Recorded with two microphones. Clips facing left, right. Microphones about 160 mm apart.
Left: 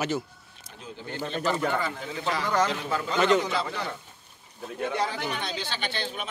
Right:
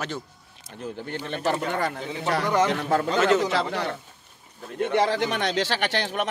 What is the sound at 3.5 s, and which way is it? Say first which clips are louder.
Speech: right 4 dB; 75° right (ahead or behind).